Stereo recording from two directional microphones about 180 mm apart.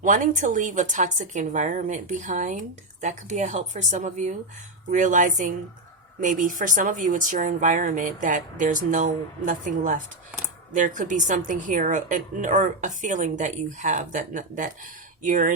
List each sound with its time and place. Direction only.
0.0 s speech: 45° right (ahead or behind)